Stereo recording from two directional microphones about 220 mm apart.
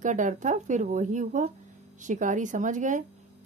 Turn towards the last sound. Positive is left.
turn(degrees=-35)  # may be behind; listen again after turning